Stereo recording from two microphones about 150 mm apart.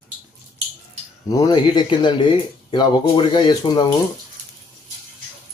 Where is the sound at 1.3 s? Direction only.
25° left (ahead or behind).